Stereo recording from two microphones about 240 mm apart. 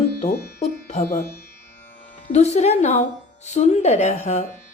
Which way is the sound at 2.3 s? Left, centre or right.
Left.